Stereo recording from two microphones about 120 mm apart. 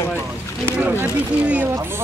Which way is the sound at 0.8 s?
15° right (ahead or behind).